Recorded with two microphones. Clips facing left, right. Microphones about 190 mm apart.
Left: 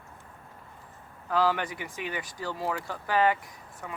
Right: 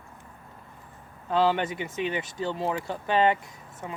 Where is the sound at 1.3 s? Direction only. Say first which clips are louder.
Right 3 dB; 25° right (ahead or behind).